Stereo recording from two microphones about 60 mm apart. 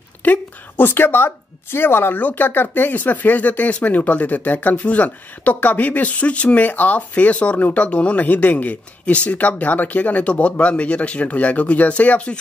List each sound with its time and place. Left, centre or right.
0.2 s a woman's voice: left